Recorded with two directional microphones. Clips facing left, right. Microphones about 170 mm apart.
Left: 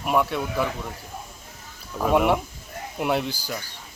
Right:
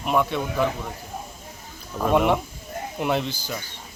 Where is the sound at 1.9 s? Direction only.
5° left (ahead or behind).